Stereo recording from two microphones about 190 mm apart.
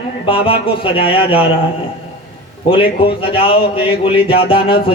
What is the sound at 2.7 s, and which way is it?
Speech, 30° left (ahead or behind).